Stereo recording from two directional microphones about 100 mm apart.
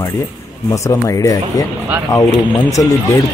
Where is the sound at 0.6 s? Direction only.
30° left (ahead or behind).